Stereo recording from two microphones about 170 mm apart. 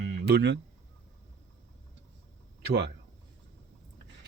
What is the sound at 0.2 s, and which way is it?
Speech, 80° right.